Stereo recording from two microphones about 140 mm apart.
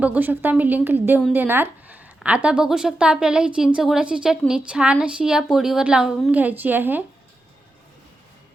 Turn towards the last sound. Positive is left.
turn(degrees=-15)  # may be behind; listen again after turning